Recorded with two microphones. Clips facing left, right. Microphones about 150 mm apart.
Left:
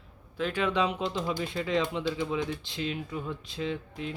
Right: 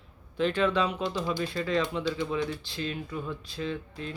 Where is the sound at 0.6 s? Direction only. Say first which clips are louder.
Left 1 dB; 20° left (ahead or behind).